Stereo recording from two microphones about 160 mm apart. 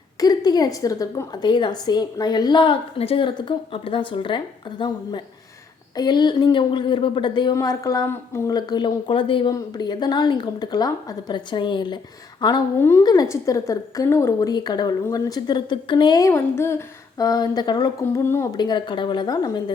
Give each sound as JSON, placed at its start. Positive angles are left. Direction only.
{"t": 0.2, "sound": "a woman's voice", "side_deg": 25}